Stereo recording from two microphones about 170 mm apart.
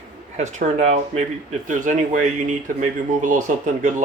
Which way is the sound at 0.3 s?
40° right (ahead or behind).